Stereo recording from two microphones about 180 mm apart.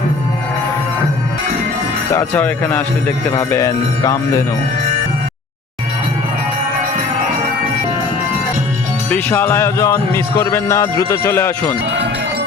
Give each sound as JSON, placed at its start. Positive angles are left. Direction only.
{"t": 2.1, "sound": "music", "side_deg": 10}
{"t": 9.0, "sound": "music", "side_deg": 10}